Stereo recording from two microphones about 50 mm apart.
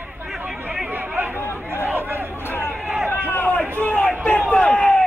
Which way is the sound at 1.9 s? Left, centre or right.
Right.